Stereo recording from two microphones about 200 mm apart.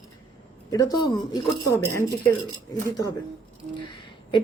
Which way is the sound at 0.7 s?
20° left (ahead or behind).